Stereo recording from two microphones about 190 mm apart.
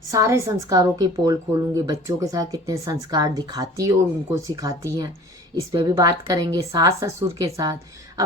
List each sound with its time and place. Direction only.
0.1 s a woman's voice: 15° right (ahead or behind)